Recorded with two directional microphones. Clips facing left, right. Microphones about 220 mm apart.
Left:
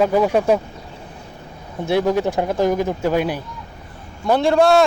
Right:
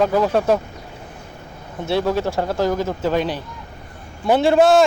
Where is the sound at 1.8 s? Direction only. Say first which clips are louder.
Left 2 dB; 15° left (ahead or behind).